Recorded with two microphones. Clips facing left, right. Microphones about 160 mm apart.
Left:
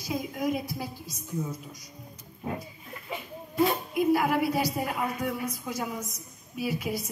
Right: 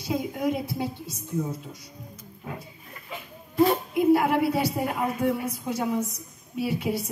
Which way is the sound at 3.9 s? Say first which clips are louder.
Right 3 dB; 25° right (ahead or behind).